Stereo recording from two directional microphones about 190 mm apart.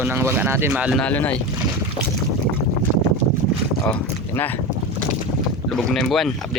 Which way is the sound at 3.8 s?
10° left (ahead or behind).